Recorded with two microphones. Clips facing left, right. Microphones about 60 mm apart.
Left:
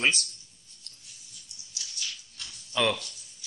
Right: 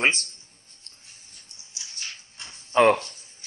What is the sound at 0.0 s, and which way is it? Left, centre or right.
Speech, right.